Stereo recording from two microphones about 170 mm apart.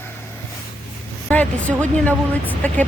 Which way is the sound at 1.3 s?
10° left (ahead or behind).